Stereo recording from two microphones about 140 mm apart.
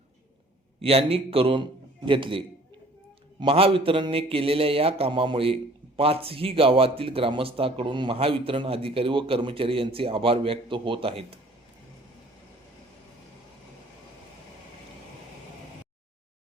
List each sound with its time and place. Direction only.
0.8 s a man's voice: 45° right (ahead or behind)
3.4 s a man's voice: 40° right (ahead or behind)